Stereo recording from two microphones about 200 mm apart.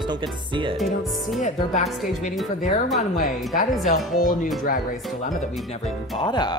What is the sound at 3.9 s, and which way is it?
Speech, 45° left (ahead or behind).